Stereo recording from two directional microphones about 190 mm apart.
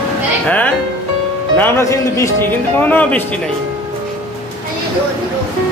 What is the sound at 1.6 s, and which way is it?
Speech, 15° left (ahead or behind).